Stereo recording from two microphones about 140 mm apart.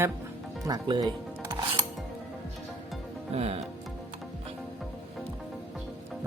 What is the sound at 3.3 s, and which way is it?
Music, 45° right (ahead or behind).